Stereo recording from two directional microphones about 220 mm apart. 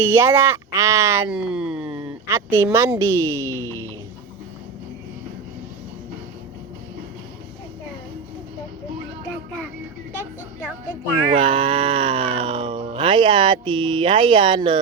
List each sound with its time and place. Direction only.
0.0 s speech: 10° right (ahead or behind)
3.6 s a sound: 10° left (ahead or behind)
11.3 s music: 25° right (ahead or behind)
12.9 s speech: 20° right (ahead or behind)